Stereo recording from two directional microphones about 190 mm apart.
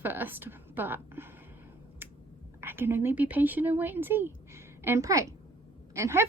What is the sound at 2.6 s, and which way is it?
A woman's voice, 10° right (ahead or behind).